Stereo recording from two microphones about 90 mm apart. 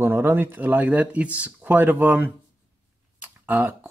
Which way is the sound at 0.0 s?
25° right (ahead or behind).